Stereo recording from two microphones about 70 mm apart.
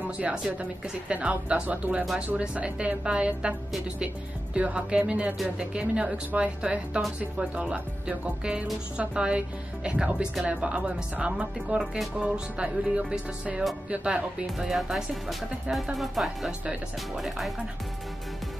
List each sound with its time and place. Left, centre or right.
0.0 s speech: right
2.1 s music: centre
4.6 s speech: centre
5.6 s music: centre
10.4 s speech: centre
12.2 s music: centre
14.6 s speech: centre